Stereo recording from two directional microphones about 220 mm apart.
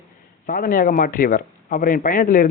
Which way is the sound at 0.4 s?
40° left (ahead or behind).